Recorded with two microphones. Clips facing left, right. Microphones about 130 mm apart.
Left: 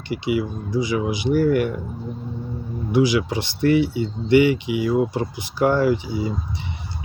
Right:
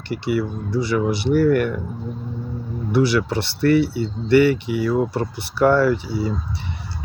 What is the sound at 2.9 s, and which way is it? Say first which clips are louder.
Speech: even; 15° left (ahead or behind).